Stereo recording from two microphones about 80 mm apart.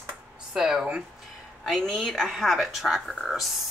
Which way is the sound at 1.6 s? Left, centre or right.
Centre.